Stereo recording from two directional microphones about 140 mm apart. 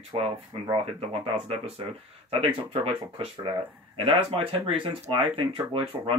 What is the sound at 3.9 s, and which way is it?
Speech, 40° right (ahead or behind).